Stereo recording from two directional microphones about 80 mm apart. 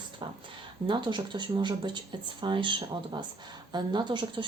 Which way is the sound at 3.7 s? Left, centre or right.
Right.